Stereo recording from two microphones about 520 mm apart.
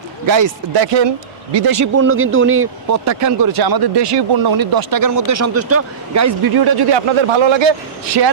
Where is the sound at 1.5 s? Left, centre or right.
Right.